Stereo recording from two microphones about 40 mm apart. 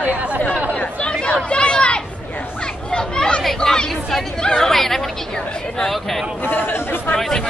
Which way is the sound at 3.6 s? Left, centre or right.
Centre.